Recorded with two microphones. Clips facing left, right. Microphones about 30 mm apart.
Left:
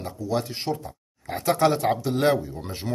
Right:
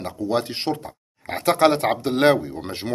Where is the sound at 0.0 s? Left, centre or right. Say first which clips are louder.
Right 4 dB; right.